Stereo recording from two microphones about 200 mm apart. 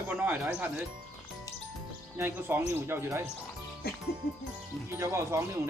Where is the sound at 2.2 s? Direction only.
10° right (ahead or behind).